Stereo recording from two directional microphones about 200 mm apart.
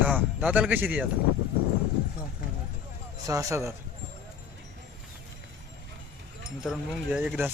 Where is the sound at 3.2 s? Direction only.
15° right (ahead or behind).